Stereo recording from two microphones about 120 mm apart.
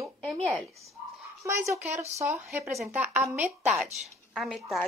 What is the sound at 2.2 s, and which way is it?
Speech, 25° right (ahead or behind).